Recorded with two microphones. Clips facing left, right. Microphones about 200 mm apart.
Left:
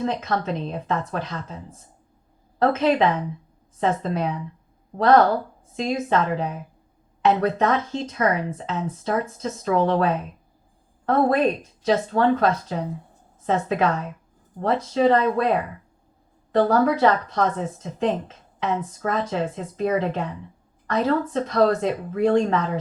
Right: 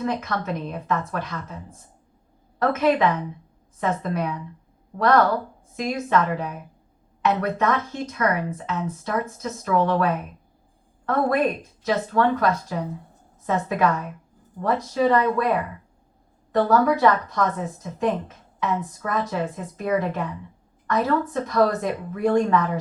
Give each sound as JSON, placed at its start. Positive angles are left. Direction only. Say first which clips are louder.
{"t": 0.0, "sound": "speech", "louder": "left 2 dB", "side_deg": 25}
{"t": 2.6, "sound": "a woman's voice", "louder": "left 1 dB", "side_deg": 25}